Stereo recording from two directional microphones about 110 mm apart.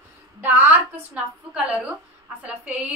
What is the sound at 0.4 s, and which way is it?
A woman's voice, 15° right (ahead or behind).